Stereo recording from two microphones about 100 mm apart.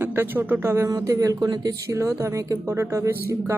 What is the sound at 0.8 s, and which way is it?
Speech, 35° right (ahead or behind).